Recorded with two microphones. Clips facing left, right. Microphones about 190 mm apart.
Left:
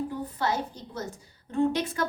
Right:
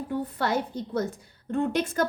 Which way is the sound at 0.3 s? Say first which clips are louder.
Right 1 dB; 60° right (ahead or behind).